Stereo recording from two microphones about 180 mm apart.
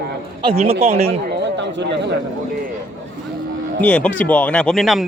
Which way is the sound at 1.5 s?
75° right (ahead or behind).